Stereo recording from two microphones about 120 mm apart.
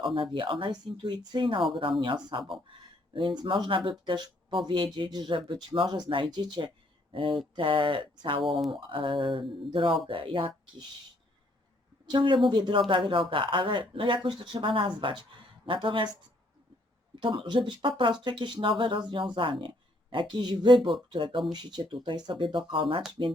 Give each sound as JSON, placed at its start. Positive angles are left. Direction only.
{"t": 0.0, "sound": "speech", "side_deg": -45}
{"t": 12.0, "sound": "speech", "side_deg": -40}
{"t": 17.2, "sound": "speech", "side_deg": -40}